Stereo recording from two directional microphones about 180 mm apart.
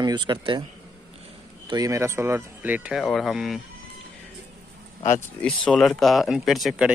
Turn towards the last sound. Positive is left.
turn(degrees=0)  # may be behind; listen again after turning